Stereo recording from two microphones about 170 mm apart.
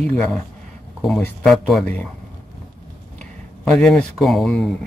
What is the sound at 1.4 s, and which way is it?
Speech, centre (ahead or behind).